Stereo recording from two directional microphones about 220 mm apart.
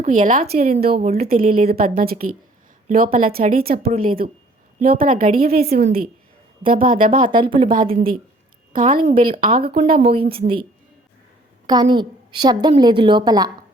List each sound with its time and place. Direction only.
0.0 s a woman's voice: 35° right (ahead or behind)
7.3 s a woman's voice: 20° right (ahead or behind)
7.9 s a woman's voice: 35° right (ahead or behind)
9.6 s a woman's voice: 25° right (ahead or behind)
11.6 s a woman's voice: 20° right (ahead or behind)